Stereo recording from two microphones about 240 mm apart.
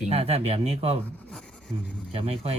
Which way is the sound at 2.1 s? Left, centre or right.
Right.